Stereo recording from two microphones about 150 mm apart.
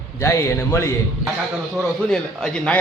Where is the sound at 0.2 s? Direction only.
20° left (ahead or behind).